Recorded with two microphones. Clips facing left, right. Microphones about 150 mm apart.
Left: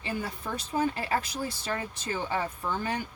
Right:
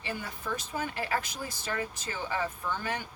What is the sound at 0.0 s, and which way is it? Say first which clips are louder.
Speech: left 3 dB; 30° left (ahead or behind).